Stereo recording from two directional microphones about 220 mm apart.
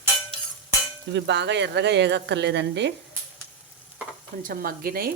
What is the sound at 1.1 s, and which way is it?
Speech, 50° right (ahead or behind).